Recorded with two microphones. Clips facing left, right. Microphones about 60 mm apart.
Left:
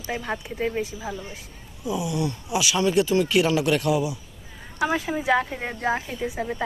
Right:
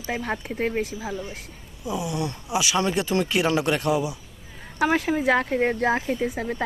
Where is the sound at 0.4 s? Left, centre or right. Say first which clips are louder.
Right 1 dB; right.